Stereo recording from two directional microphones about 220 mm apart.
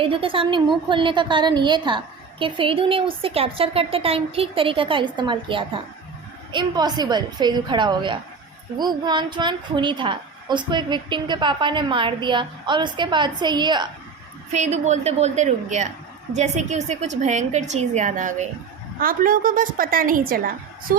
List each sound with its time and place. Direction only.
0.0 s a woman's voice: 25° right (ahead or behind)
14.5 s a woman's voice: 30° right (ahead or behind)